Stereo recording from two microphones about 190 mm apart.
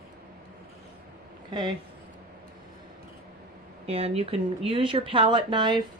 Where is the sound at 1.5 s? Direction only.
25° right (ahead or behind).